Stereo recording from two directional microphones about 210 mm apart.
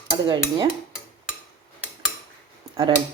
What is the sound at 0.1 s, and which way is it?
Speech, 20° right (ahead or behind).